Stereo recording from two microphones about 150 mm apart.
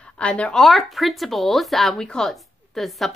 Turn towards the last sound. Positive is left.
turn(degrees=0)  # may be behind; listen again after turning